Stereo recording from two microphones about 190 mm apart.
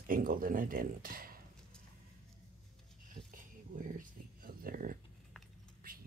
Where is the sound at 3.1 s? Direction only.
45° right (ahead or behind).